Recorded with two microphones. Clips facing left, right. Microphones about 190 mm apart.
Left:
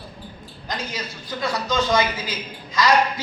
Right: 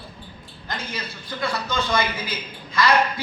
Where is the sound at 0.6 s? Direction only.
20° left (ahead or behind).